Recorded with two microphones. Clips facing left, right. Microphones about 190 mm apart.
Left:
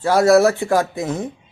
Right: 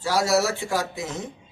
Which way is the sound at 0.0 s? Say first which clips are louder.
Left 9 dB; 55° left (ahead or behind).